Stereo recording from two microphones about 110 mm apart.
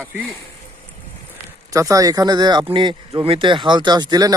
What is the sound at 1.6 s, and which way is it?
Speech, 30° right (ahead or behind).